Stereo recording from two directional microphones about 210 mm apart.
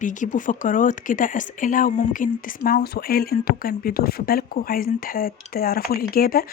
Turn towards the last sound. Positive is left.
turn(degrees=45)  # may be behind; listen again after turning